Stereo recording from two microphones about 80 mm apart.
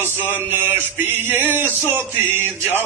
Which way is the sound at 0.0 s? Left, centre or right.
Right.